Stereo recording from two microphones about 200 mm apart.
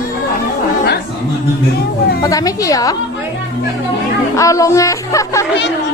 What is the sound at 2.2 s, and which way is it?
Speech, 15° left (ahead or behind).